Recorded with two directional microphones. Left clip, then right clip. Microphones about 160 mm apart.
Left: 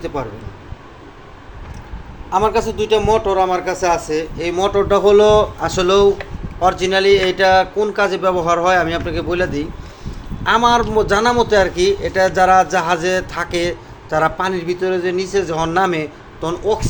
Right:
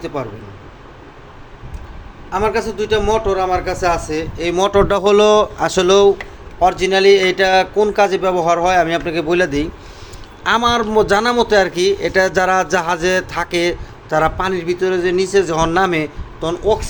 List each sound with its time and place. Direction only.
0.0 s speech: 10° right (ahead or behind)
2.3 s a man's voice: 5° left (ahead or behind); by 4.5 s 10° right (ahead or behind)
4.7 s speech: 55° right (ahead or behind); by 6.1 s 35° right (ahead or behind)
6.6 s a man's voice: 15° right (ahead or behind)
9.3 s a man's voice: 35° right (ahead or behind)
16.4 s speech: 10° right (ahead or behind)